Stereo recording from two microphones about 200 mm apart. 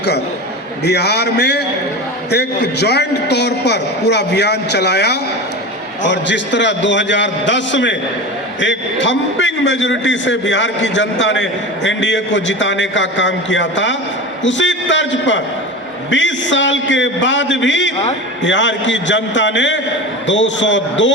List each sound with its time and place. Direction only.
0.9 s a man's voice: 55° left (ahead or behind)